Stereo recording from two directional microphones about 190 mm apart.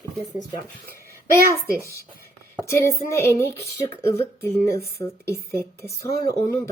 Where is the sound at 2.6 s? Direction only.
15° left (ahead or behind).